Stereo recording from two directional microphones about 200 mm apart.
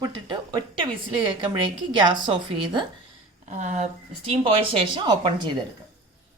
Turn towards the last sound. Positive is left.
turn(degrees=-25)  # may be behind; listen again after turning